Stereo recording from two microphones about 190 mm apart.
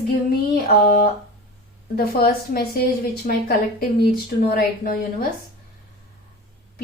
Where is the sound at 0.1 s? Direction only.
50° left (ahead or behind).